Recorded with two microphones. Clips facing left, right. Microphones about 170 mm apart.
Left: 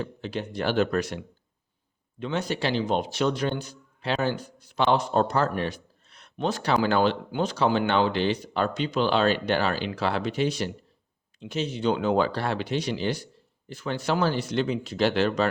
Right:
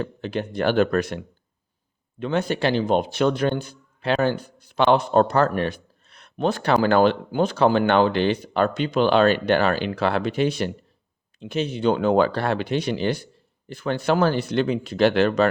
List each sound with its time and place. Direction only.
0.0 s speech: 55° right (ahead or behind)